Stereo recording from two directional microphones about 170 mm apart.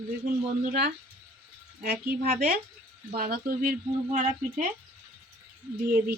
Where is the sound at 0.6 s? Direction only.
60° right (ahead or behind).